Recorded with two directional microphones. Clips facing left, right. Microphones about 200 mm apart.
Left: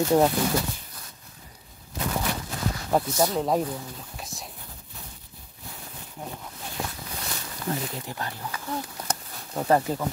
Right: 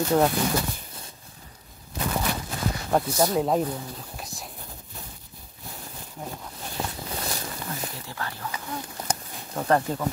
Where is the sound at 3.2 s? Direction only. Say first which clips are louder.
Right 3 dB; centre (ahead or behind).